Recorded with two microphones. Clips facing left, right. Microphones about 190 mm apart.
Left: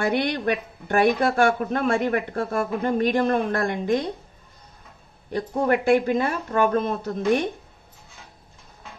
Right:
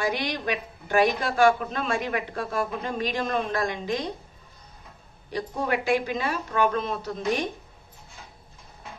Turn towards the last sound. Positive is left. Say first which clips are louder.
# left 5 dB
turn(degrees=55)  # may be behind; listen again after turning